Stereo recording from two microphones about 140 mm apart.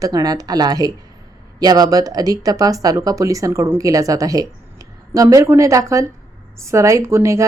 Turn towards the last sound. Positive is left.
turn(degrees=-20)  # may be behind; listen again after turning